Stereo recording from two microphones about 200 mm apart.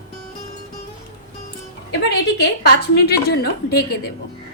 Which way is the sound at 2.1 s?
55° left (ahead or behind).